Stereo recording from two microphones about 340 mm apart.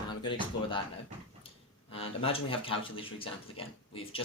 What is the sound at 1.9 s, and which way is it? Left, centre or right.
Speech, centre.